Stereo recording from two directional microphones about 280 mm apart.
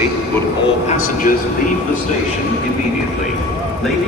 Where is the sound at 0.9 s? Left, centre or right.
Left.